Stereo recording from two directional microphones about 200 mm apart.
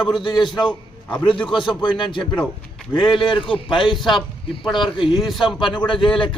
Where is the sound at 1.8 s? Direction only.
25° left (ahead or behind).